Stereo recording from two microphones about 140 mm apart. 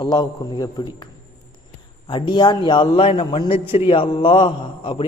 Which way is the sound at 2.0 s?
35° left (ahead or behind).